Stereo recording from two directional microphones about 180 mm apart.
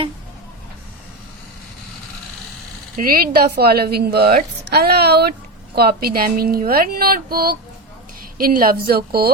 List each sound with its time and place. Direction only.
3.0 s a woman's voice: 55° right (ahead or behind)